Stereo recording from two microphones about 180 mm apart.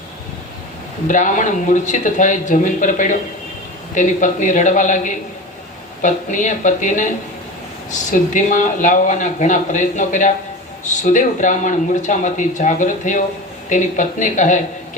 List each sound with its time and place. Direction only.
1.0 s speech: 45° left (ahead or behind)